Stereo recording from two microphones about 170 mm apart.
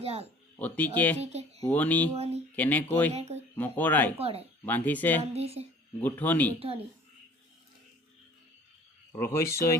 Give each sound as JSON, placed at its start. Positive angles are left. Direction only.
{"t": 0.0, "sound": "speech", "side_deg": -35}
{"t": 0.6, "sound": "speech", "side_deg": 10}
{"t": 1.2, "sound": "a woman's voice", "side_deg": -40}
{"t": 1.7, "sound": "speech", "side_deg": 10}
{"t": 2.1, "sound": "a woman's voice", "side_deg": -35}
{"t": 2.6, "sound": "speech", "side_deg": 10}
{"t": 3.2, "sound": "a woman's voice", "side_deg": -40}
{"t": 3.5, "sound": "speech", "side_deg": 10}
{"t": 4.2, "sound": "a woman's voice", "side_deg": -35}
{"t": 4.6, "sound": "speech", "side_deg": 10}
{"t": 5.3, "sound": "a woman's voice", "side_deg": -35}
{"t": 6.0, "sound": "speech", "side_deg": 10}
{"t": 9.1, "sound": "speech", "side_deg": 15}